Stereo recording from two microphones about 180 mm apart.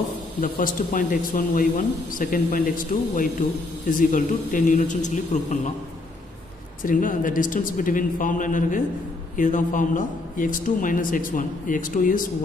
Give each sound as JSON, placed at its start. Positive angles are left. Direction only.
{"t": 0.4, "sound": "a man's voice", "side_deg": 50}
{"t": 6.8, "sound": "a man's voice", "side_deg": 50}